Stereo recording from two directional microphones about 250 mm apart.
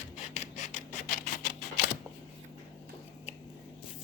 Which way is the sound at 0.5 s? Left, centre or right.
Left.